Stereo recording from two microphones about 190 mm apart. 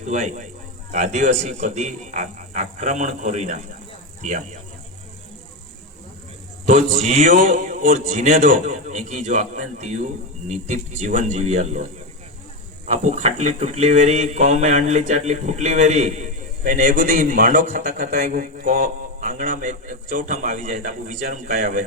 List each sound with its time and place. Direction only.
0.0 s a man's voice: 40° right (ahead or behind)
6.7 s a man's voice: 40° right (ahead or behind)